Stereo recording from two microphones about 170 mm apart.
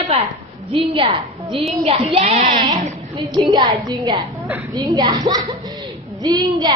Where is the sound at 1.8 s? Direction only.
35° right (ahead or behind).